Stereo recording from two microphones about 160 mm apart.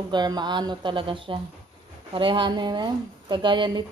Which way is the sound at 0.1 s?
25° right (ahead or behind).